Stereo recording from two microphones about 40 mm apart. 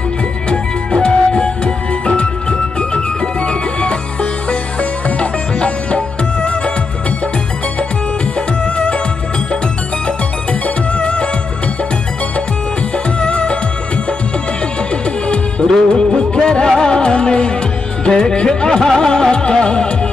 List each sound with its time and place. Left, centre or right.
0.5 s music: left
11.0 s music: left
13.2 s music: left
15.2 s music: left
18.0 s speech: centre
18.9 s music: centre